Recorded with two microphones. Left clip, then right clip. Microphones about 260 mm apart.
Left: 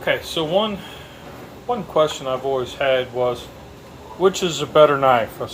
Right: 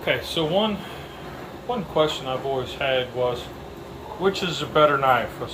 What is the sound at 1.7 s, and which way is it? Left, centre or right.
A man's voice, centre.